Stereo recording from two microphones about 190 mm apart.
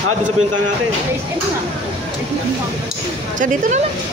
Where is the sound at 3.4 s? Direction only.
40° right (ahead or behind).